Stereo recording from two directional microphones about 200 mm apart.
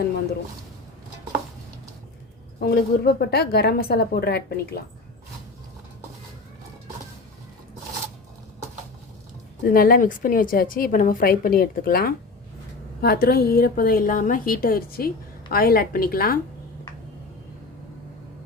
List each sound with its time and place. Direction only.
2.6 s a woman's voice: 50° left (ahead or behind)
9.6 s a woman's voice: 45° left (ahead or behind)